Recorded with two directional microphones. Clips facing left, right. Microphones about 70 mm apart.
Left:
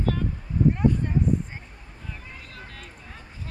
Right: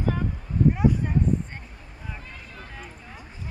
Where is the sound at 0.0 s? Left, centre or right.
Centre.